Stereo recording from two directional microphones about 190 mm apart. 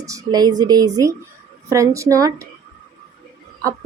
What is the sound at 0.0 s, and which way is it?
A woman's voice, 15° right (ahead or behind).